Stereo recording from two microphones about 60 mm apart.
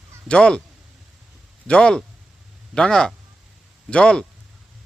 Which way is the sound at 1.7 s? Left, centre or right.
Centre.